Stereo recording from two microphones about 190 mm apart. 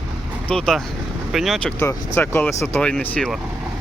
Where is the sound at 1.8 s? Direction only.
10° left (ahead or behind).